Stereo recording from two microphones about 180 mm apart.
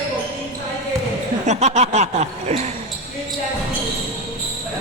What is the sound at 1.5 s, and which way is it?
Speech, 40° right (ahead or behind).